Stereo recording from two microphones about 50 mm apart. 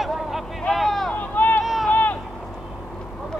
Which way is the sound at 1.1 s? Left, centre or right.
Left.